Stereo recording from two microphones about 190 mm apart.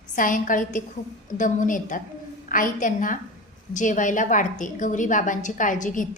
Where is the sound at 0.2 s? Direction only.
45° left (ahead or behind).